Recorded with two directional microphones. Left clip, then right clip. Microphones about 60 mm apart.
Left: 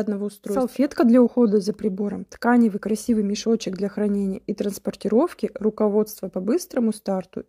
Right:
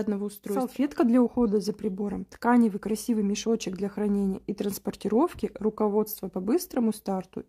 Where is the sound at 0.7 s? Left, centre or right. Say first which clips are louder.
Left 7 dB; left.